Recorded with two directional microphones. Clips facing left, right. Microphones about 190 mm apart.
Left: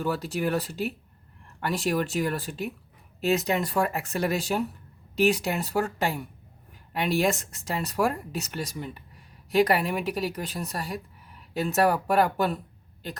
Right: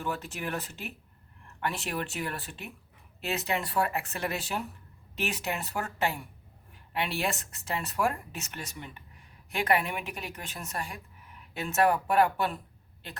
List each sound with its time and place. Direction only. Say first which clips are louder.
0.0 s speech: left 7 dB; 35° left (ahead or behind)